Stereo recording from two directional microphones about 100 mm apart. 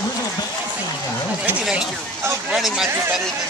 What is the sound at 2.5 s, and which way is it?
Speech, 5° right (ahead or behind).